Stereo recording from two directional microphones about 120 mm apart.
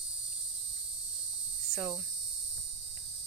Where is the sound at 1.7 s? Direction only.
5° right (ahead or behind).